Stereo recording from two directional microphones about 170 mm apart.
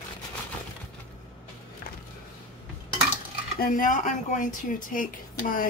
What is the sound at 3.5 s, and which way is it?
Speech, 55° left (ahead or behind).